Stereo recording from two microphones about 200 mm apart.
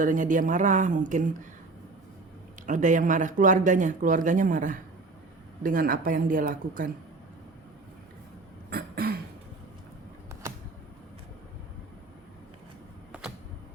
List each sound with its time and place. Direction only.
0.0 s speech: 40° right (ahead or behind)
2.6 s speech: 40° right (ahead or behind)
8.7 s throat clearing: 50° right (ahead or behind)